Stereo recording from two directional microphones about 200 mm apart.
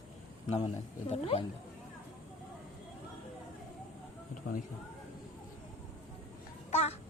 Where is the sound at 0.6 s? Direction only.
30° left (ahead or behind).